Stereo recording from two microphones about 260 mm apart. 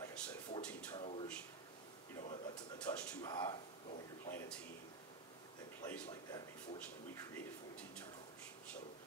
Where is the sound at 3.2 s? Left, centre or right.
Centre.